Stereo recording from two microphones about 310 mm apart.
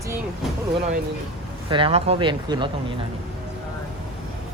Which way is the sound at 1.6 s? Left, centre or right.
Centre.